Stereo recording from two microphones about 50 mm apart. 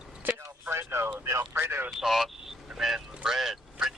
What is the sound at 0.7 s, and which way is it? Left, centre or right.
Speech, right.